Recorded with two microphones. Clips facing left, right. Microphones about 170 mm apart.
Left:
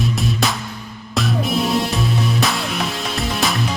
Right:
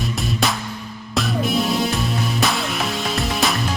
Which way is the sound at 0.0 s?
Centre (ahead or behind).